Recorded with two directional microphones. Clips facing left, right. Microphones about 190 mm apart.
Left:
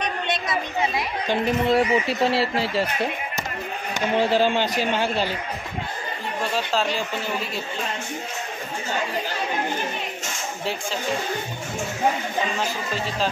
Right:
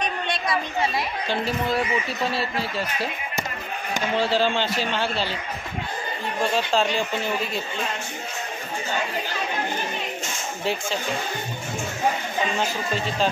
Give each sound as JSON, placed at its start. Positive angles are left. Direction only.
{"t": 0.3, "sound": "a woman's voice", "side_deg": 20}
{"t": 4.2, "sound": "a man's voice", "side_deg": 15}
{"t": 6.7, "sound": "speech", "side_deg": 5}